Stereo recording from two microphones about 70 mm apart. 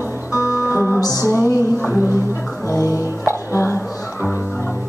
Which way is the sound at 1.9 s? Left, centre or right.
Right.